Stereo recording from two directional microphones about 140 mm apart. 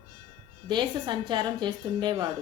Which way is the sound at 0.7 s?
35° right (ahead or behind).